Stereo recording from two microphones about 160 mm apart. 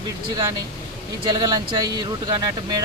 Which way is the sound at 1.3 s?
25° right (ahead or behind).